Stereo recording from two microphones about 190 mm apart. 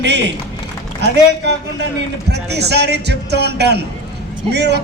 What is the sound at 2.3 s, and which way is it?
Speech, 60° right (ahead or behind).